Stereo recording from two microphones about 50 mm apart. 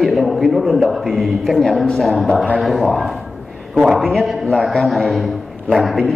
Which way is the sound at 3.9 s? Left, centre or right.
Centre.